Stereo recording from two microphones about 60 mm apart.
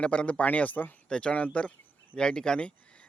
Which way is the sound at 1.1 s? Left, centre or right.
Centre.